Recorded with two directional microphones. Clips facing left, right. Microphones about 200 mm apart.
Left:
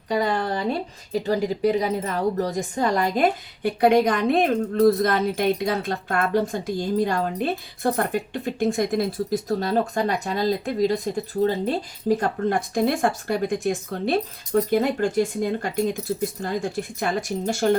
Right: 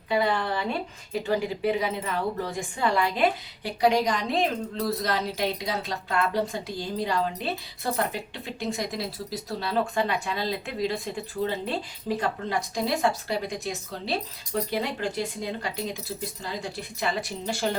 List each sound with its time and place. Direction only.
0.1 s a woman's voice: 40° left (ahead or behind)